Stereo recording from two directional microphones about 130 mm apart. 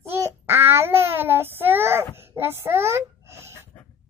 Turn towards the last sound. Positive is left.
turn(degrees=-20)  # may be behind; listen again after turning